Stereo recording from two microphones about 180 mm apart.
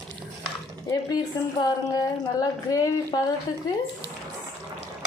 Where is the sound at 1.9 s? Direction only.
20° left (ahead or behind).